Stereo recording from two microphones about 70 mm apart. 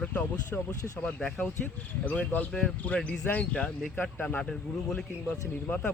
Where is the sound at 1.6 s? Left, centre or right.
Left.